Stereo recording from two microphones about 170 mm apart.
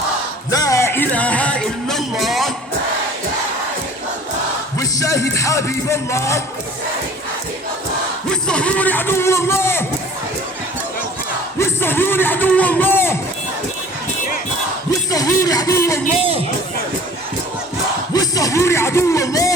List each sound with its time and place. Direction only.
0.5 s music: 20° left (ahead or behind); by 2.5 s centre (ahead or behind)
4.8 s speech: 20° left (ahead or behind)
8.3 s a man's voice: 5° left (ahead or behind)
11.6 s speech: 15° left (ahead or behind)
15.1 s speech: 20° left (ahead or behind)
18.1 s speech: 20° left (ahead or behind)